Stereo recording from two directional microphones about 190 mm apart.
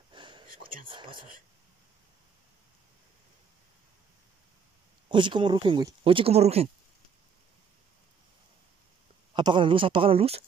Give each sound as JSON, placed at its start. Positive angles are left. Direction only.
{"t": 0.1, "sound": "whispering", "side_deg": -25}
{"t": 0.8, "sound": "speech", "side_deg": -25}
{"t": 5.0, "sound": "speech", "side_deg": -25}
{"t": 9.3, "sound": "speech", "side_deg": -25}